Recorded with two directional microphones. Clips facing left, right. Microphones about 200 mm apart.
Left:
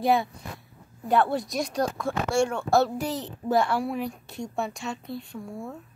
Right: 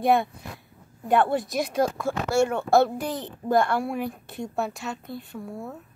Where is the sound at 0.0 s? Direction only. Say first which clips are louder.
Right 2 dB; centre (ahead or behind).